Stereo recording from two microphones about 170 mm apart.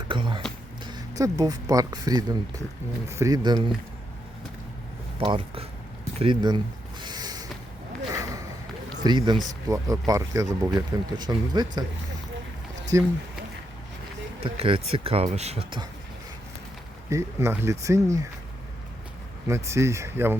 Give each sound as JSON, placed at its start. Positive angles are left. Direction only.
{"t": 0.1, "sound": "speech", "side_deg": -30}
{"t": 5.2, "sound": "speech", "side_deg": -30}
{"t": 7.0, "sound": "a sound", "side_deg": -25}
{"t": 9.0, "sound": "speech", "side_deg": -25}
{"t": 12.9, "sound": "speech", "side_deg": -15}
{"t": 14.4, "sound": "speech", "side_deg": -35}
{"t": 17.1, "sound": "speech", "side_deg": -15}
{"t": 19.5, "sound": "speech", "side_deg": -15}